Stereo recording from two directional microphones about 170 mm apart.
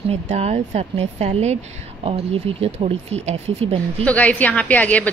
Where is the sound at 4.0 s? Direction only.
10° left (ahead or behind).